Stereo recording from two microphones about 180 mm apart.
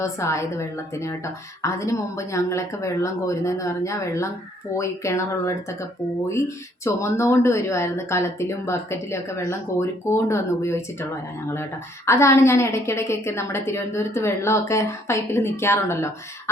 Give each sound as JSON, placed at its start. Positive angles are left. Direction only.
{"t": 0.0, "sound": "a woman's voice", "side_deg": 15}
{"t": 6.8, "sound": "a woman's voice", "side_deg": 15}
{"t": 12.0, "sound": "a woman's voice", "side_deg": 15}